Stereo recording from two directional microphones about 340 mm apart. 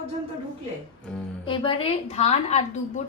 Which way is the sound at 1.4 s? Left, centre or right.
Centre.